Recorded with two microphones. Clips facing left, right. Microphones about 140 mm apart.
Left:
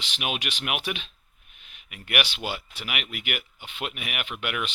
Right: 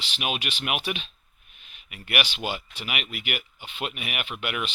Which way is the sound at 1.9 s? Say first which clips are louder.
Even; 5° right (ahead or behind).